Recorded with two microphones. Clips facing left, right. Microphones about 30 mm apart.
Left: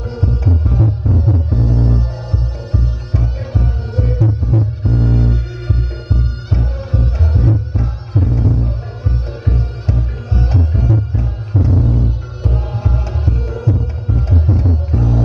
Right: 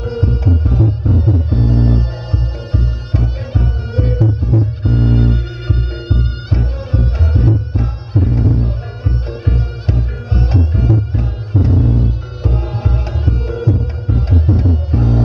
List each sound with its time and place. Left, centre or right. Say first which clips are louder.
0.2 s music: even; right